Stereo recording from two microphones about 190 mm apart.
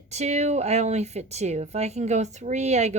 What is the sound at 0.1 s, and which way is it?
A woman's voice, 35° right (ahead or behind).